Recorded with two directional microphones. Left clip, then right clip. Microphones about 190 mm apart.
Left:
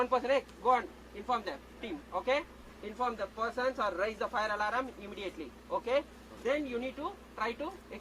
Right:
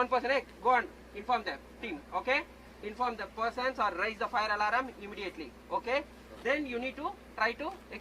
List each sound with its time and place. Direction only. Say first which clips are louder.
0.0 s speech: even; 10° right (ahead or behind)